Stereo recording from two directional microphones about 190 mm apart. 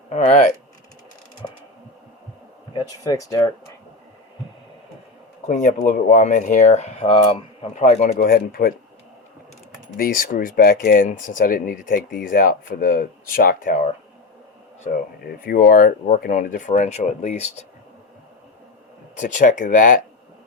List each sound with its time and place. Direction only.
0.1 s speech: 35° left (ahead or behind)
2.7 s speech: 20° left (ahead or behind)
5.5 s speech: 45° left (ahead or behind)
10.0 s speech: 50° left (ahead or behind)
19.1 s speech: 40° left (ahead or behind)